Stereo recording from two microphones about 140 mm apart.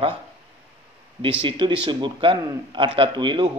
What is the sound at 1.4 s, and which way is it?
A man's voice, 35° right (ahead or behind).